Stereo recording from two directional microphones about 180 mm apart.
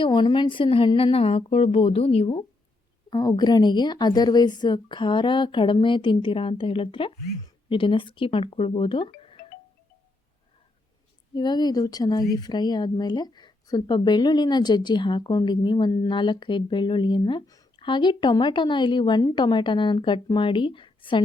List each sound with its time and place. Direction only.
0.0 s a woman's voice: 25° left (ahead or behind)
11.3 s speech: 25° left (ahead or behind)